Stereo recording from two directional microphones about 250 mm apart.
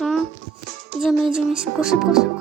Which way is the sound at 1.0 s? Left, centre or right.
Centre.